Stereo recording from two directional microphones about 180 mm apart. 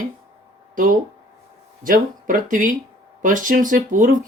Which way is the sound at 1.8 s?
50° right (ahead or behind).